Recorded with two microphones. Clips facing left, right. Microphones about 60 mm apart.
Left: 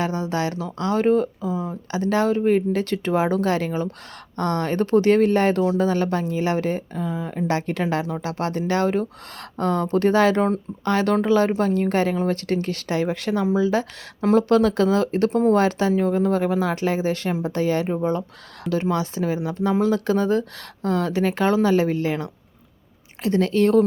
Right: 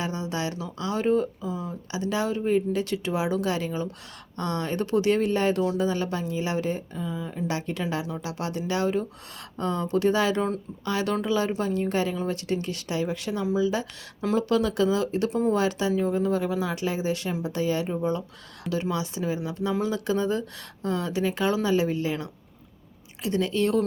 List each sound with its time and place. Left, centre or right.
0.0 s speech: left
1.9 s speech: left
13.4 s speech: left
17.8 s speech: left